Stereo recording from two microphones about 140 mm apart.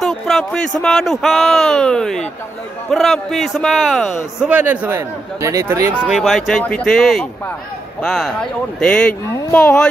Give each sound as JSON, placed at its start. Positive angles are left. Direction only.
{"t": 0.0, "sound": "speech", "side_deg": 0}
{"t": 4.5, "sound": "a man's voice", "side_deg": -15}
{"t": 5.9, "sound": "speech", "side_deg": 0}